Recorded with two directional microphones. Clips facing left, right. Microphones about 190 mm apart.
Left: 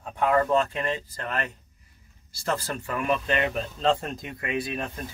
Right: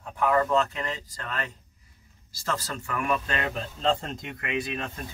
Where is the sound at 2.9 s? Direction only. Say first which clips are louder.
Left 2 dB; 30° left (ahead or behind).